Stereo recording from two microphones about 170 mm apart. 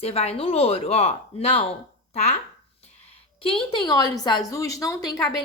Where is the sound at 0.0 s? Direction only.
35° left (ahead or behind).